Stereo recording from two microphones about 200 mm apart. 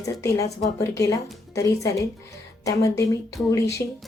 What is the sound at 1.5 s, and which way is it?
A woman's voice, 15° left (ahead or behind).